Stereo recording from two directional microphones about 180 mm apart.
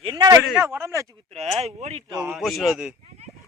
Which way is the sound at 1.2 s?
35° right (ahead or behind).